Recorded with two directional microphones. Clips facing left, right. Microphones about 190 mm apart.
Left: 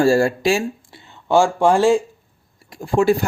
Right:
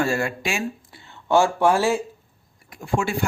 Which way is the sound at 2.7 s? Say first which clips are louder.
Left 9 dB; 35° left (ahead or behind).